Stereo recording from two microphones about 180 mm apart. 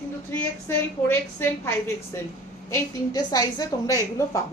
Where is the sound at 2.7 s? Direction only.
20° left (ahead or behind).